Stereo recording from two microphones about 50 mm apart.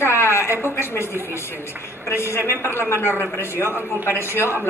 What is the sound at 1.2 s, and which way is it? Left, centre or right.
A man's voice, left.